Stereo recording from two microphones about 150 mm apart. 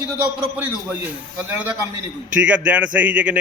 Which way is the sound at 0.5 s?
10° right (ahead or behind).